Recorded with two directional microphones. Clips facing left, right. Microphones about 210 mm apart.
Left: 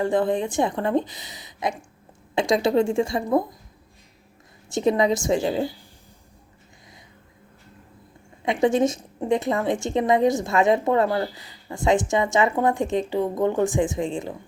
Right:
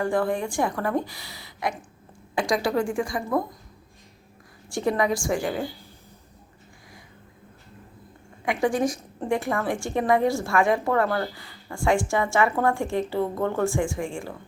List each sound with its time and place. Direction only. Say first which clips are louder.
0.0 s a woman's voice: left 3 dB; 20° left (ahead or behind)
4.7 s a woman's voice: left 3 dB; 20° left (ahead or behind)
8.4 s a woman's voice: left 4 dB; 25° left (ahead or behind)